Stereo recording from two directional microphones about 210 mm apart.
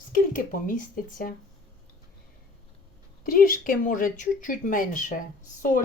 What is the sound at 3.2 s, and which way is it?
Speech, 40° left (ahead or behind).